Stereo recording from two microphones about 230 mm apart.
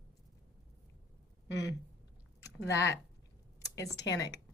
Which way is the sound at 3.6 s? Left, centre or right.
Centre.